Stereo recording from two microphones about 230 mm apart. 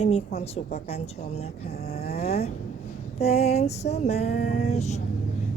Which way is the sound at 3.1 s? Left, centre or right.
Left.